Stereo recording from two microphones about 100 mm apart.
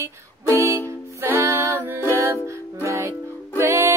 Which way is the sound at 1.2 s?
30° right (ahead or behind).